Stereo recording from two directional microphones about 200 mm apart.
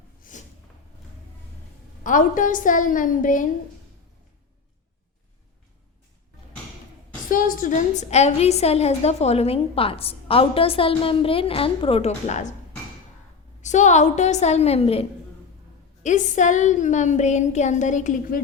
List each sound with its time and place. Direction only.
0.2 s a sound: 40° left (ahead or behind)
2.0 s a woman's voice: 40° left (ahead or behind)
7.3 s a woman's voice: 45° left (ahead or behind)
13.6 s a woman's voice: 35° left (ahead or behind)
16.0 s a woman's voice: 40° left (ahead or behind)